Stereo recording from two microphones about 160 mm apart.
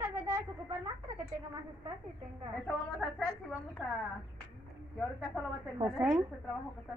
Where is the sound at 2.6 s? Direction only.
5° left (ahead or behind).